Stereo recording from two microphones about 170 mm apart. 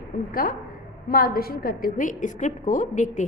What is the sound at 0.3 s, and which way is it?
A woman's voice, 55° left (ahead or behind).